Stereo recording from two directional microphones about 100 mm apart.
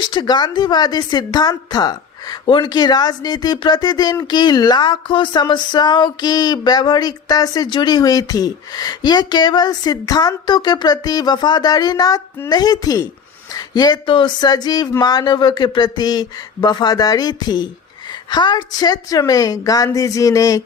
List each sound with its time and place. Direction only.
0.0 s a woman's voice: 50° left (ahead or behind)